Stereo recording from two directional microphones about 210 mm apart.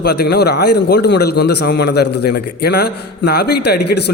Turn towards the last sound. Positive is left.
turn(degrees=50)  # may be behind; listen again after turning